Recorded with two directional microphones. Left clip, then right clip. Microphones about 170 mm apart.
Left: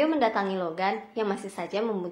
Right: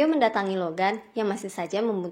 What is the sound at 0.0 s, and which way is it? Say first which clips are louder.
A woman's voice: right 2 dB; 50° right (ahead or behind).